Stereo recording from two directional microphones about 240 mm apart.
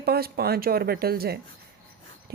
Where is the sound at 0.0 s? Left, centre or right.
Right.